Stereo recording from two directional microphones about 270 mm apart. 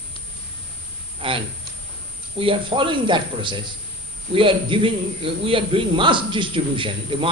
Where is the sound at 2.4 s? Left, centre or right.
Centre.